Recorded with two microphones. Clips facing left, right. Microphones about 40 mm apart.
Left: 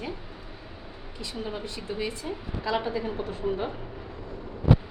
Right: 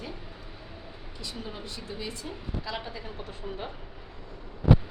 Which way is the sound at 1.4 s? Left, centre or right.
Left.